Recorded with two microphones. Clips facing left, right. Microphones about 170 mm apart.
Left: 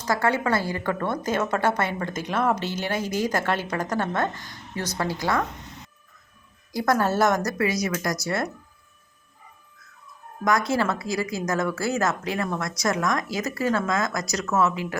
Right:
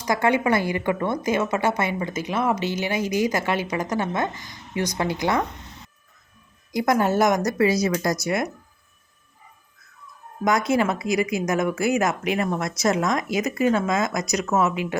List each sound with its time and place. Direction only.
0.0 s a woman's voice: 15° right (ahead or behind)
6.7 s a woman's voice: 15° right (ahead or behind)
7.6 s speech: 30° right (ahead or behind)
10.4 s speech: 20° right (ahead or behind)